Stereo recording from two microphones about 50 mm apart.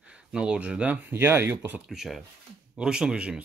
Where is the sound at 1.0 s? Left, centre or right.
Right.